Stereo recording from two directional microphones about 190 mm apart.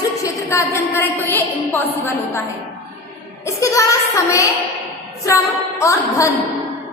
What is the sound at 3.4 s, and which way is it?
A woman's voice, 15° left (ahead or behind).